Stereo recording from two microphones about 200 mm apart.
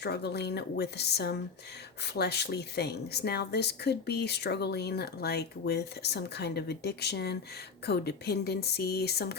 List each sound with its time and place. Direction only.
0.0 s a woman's voice: 55° left (ahead or behind)